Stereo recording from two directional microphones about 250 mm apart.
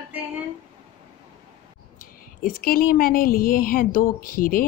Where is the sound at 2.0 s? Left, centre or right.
Left.